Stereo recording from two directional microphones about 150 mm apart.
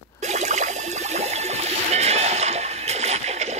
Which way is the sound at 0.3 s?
50° right (ahead or behind).